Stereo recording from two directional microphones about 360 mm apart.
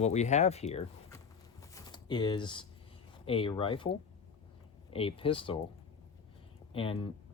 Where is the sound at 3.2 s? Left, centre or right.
Centre.